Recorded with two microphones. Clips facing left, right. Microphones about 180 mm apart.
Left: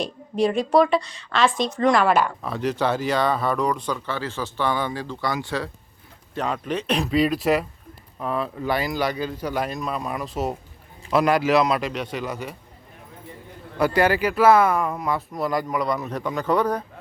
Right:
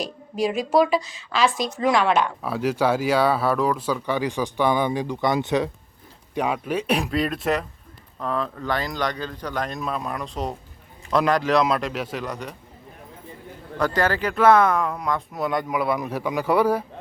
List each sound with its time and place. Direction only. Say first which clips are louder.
0.0 s a woman's voice: left 3 dB; centre (ahead or behind)
7.1 s a woman's voice: left 3 dB; centre (ahead or behind)
13.7 s speech: left 3 dB; 10° left (ahead or behind); by 16.8 s 10° right (ahead or behind)